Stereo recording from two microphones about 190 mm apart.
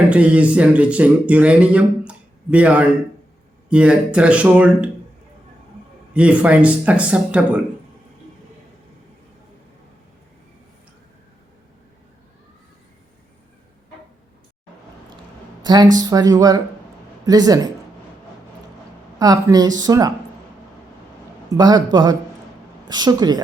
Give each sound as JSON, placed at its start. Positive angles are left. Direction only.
{"t": 0.1, "sound": "speech", "side_deg": -5}
{"t": 6.1, "sound": "speech", "side_deg": -5}
{"t": 15.6, "sound": "speech", "side_deg": -20}
{"t": 19.2, "sound": "speech", "side_deg": -20}
{"t": 21.6, "sound": "speech", "side_deg": -20}